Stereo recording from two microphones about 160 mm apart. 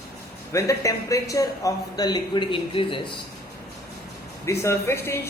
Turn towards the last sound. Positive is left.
turn(degrees=15)  # may be behind; listen again after turning